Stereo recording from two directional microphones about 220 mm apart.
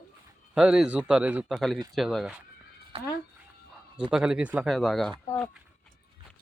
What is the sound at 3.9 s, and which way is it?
Speech, 5° right (ahead or behind).